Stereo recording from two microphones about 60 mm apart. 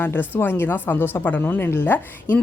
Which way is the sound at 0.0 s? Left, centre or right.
Left.